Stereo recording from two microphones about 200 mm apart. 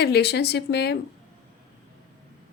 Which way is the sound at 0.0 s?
55° left (ahead or behind).